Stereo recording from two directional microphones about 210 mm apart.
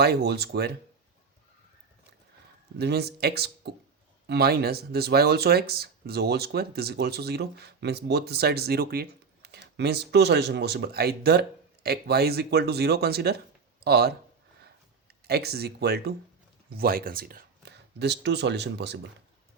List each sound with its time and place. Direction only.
0.0 s speech: 50° right (ahead or behind)
2.7 s speech: 50° right (ahead or behind)
14.6 s a sound: 50° right (ahead or behind)
16.7 s speech: 45° right (ahead or behind)